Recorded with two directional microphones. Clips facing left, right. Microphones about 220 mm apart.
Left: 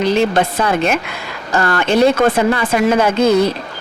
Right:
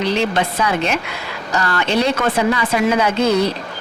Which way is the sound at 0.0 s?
45° left (ahead or behind).